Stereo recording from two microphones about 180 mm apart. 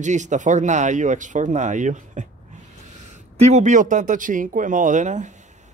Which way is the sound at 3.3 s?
40° right (ahead or behind).